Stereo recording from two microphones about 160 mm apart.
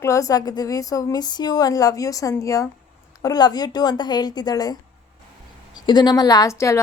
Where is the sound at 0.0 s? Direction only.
20° left (ahead or behind).